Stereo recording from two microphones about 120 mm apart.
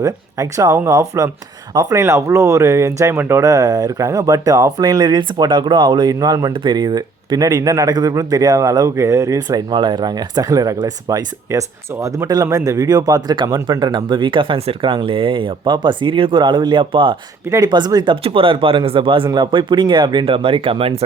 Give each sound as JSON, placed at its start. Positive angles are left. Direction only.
{"t": 0.0, "sound": "speech", "side_deg": -25}
{"t": 17.5, "sound": "speech", "side_deg": -35}